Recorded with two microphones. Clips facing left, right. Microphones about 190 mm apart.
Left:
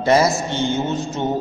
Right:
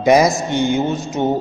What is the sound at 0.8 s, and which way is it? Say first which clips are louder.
Mantra: right 3 dB; 40° right (ahead or behind).